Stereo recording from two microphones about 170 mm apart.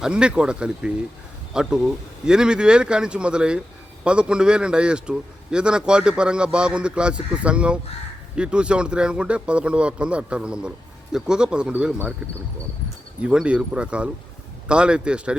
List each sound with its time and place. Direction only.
0.0 s a man's voice: 5° right (ahead or behind)
13.2 s a man's voice: 5° right (ahead or behind)